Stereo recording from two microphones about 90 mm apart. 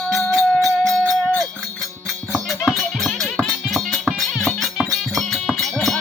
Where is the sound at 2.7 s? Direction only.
Centre (ahead or behind).